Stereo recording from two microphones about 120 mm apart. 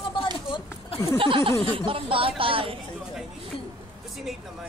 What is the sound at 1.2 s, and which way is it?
Speech, 45° right (ahead or behind).